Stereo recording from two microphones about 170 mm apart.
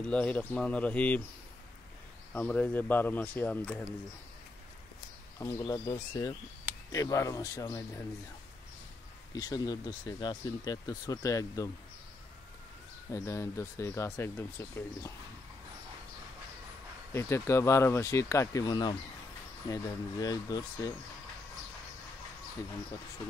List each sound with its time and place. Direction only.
0.0 s speech: 5° left (ahead or behind)
2.3 s speech: 10° left (ahead or behind)
5.6 s speech: 25° left (ahead or behind)
9.3 s speech: 25° left (ahead or behind)
13.1 s speech: 15° left (ahead or behind)
17.1 s speech: 15° left (ahead or behind)